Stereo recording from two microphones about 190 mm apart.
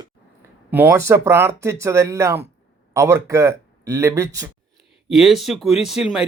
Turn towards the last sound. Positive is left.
turn(degrees=0)  # may be behind; listen again after turning